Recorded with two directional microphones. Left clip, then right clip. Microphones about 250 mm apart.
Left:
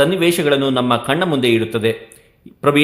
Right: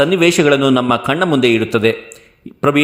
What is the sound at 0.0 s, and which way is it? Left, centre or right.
A man's voice, right.